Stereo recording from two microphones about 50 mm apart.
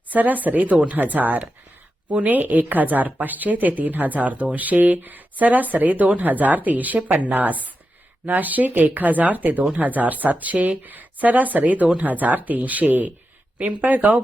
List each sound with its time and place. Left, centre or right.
0.1 s a woman's voice: right